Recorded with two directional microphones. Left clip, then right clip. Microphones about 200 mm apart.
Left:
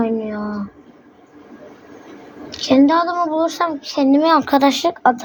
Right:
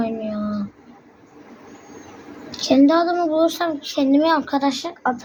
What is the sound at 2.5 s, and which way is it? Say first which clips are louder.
Speech: left 2 dB; centre (ahead or behind).